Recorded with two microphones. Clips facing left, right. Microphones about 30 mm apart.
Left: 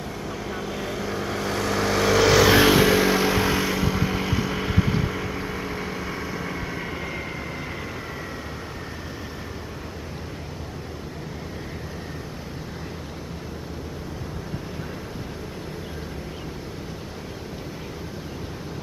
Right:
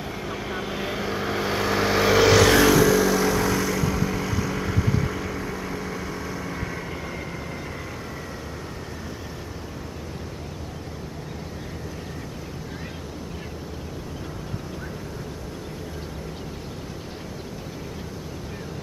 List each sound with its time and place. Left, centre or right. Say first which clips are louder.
0.2 s vehicle: right 1 dB; centre
2.5 s vehicle: even; left